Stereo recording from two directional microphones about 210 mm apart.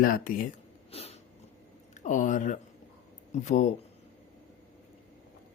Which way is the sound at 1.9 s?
35° left (ahead or behind).